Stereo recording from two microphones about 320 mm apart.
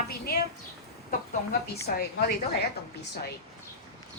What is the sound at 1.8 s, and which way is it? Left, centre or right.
Speech, left.